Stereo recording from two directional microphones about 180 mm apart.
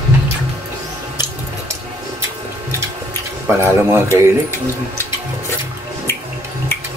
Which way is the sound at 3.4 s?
15° right (ahead or behind).